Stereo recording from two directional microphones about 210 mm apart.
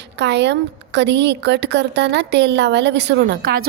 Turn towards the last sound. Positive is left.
turn(degrees=-45)  # may be behind; listen again after turning